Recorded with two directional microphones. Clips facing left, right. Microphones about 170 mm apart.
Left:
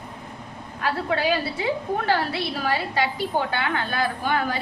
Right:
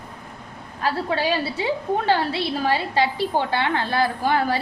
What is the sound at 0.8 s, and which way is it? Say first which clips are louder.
A woman's voice: right 1 dB; 30° right (ahead or behind).